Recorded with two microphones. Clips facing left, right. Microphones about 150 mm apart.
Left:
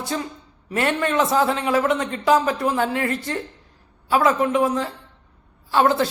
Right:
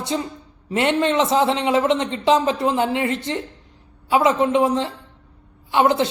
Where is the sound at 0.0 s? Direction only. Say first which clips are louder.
Right 2 dB; 25° right (ahead or behind).